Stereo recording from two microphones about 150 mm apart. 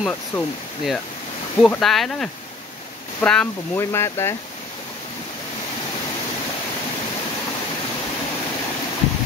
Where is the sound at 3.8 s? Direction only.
15° left (ahead or behind).